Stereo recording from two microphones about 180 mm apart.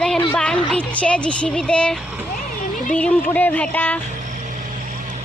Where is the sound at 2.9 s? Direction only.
10° left (ahead or behind).